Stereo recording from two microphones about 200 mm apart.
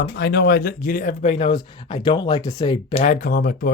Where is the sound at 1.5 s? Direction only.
20° left (ahead or behind).